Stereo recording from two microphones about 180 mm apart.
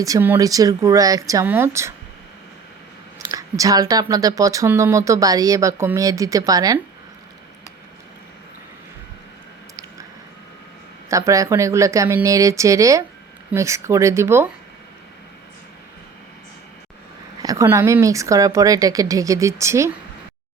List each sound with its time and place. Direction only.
0.0 s speech: 15° right (ahead or behind)
3.2 s speech: 20° right (ahead or behind)
11.1 s speech: 15° right (ahead or behind)
17.4 s speech: 20° right (ahead or behind)